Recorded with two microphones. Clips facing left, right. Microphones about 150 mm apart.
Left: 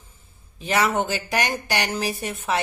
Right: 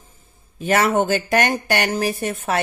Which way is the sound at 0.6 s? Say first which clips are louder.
Right 4 dB; 50° right (ahead or behind).